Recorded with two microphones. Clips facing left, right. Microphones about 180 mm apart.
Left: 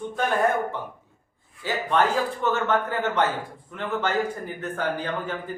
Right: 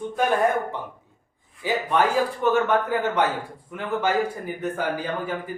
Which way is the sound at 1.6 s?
10° right (ahead or behind).